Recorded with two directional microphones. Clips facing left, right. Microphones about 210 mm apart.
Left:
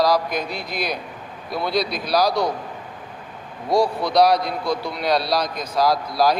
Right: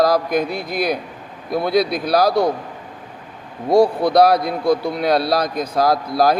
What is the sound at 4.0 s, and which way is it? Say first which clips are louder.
A man's voice: right 3 dB; 55° right (ahead or behind).